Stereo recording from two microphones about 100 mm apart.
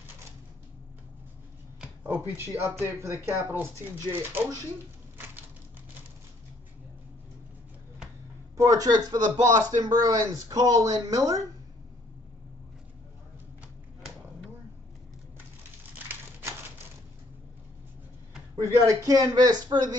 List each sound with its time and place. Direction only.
2.0 s speech: 20° right (ahead or behind)
8.5 s speech: 35° right (ahead or behind)
18.6 s speech: 35° right (ahead or behind)